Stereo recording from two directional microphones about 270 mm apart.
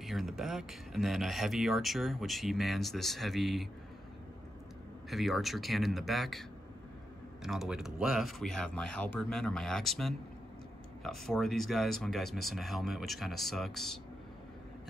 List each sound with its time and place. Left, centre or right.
0.0 s speech: centre
5.1 s speech: centre
7.4 s speech: centre